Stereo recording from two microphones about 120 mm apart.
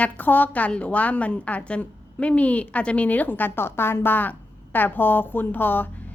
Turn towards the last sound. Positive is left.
turn(degrees=15)  # may be behind; listen again after turning